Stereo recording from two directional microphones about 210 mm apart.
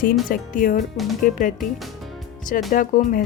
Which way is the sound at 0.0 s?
40° left (ahead or behind).